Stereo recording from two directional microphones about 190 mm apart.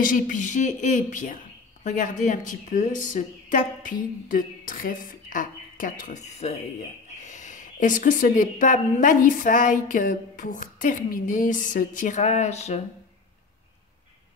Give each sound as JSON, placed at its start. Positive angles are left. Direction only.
{"t": 0.0, "sound": "a woman's voice", "side_deg": 45}